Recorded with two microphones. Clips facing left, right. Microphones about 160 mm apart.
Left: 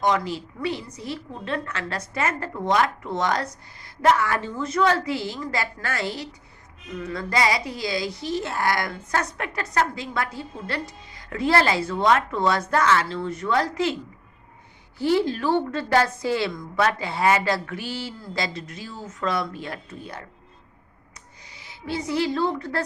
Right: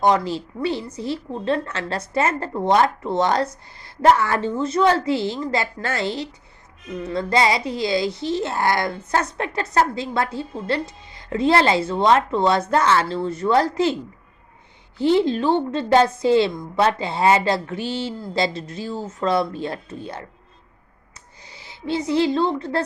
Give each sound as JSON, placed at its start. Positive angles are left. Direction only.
{"t": 0.0, "sound": "a woman's voice", "side_deg": -30}
{"t": 14.9, "sound": "a woman's voice", "side_deg": -20}
{"t": 21.5, "sound": "speech", "side_deg": -30}